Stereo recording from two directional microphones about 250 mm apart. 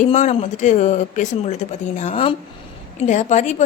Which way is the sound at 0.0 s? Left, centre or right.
Left.